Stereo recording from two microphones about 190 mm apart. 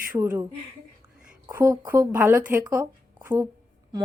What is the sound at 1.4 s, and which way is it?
Speech, 15° right (ahead or behind).